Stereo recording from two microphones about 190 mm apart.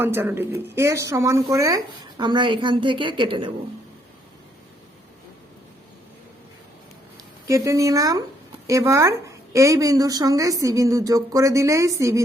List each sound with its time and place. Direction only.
0.0 s speech: 10° right (ahead or behind)
7.4 s speech: 15° right (ahead or behind)